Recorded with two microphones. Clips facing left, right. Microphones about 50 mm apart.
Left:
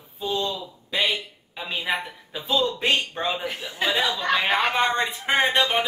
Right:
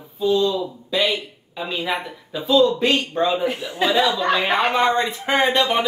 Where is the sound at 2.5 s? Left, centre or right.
Left.